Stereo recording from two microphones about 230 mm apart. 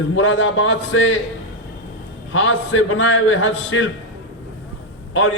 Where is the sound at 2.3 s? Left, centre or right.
Left.